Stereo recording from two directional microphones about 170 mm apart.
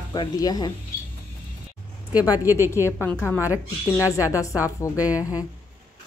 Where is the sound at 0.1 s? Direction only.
25° left (ahead or behind).